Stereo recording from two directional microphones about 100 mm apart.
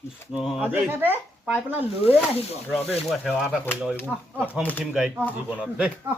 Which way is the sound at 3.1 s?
Centre (ahead or behind).